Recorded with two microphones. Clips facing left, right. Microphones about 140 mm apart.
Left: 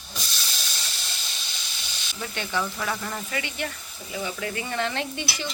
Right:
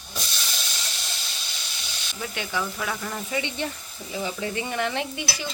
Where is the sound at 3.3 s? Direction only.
25° right (ahead or behind).